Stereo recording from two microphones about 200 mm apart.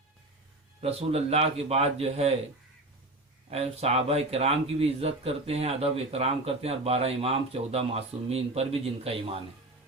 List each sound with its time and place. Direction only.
0.8 s a man's voice: 30° right (ahead or behind)
3.5 s a man's voice: 30° right (ahead or behind)